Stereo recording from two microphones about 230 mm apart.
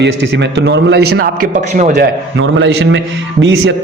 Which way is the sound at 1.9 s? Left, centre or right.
Right.